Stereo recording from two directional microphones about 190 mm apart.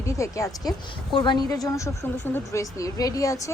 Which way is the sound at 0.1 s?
15° left (ahead or behind).